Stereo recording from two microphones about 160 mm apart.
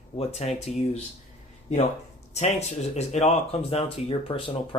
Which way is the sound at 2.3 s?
45° left (ahead or behind).